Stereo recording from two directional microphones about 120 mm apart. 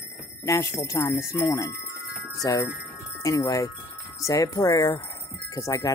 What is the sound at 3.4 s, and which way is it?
Speech, 30° left (ahead or behind).